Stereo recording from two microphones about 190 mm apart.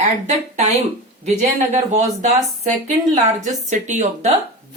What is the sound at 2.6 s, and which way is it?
Speech, 35° right (ahead or behind).